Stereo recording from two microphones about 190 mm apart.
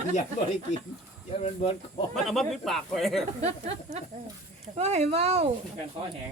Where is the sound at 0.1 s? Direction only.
40° left (ahead or behind).